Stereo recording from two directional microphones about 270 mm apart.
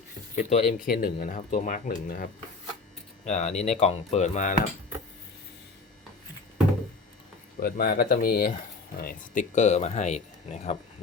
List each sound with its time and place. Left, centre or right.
0.3 s speech: left
7.6 s speech: left